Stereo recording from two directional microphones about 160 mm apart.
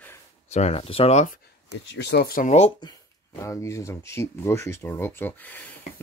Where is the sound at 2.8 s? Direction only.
25° left (ahead or behind).